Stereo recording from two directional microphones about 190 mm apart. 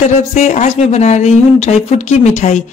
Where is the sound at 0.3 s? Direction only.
40° left (ahead or behind).